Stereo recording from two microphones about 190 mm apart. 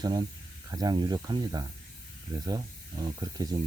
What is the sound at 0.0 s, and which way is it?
Speech, 20° right (ahead or behind).